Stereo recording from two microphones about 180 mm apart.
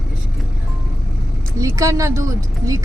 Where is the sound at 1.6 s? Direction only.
15° right (ahead or behind).